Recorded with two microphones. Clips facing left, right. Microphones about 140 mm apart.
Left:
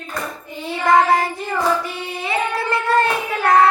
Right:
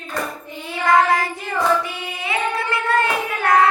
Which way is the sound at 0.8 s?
30° left (ahead or behind).